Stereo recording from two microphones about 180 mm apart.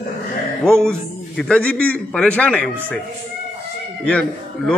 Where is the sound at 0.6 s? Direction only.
5° left (ahead or behind).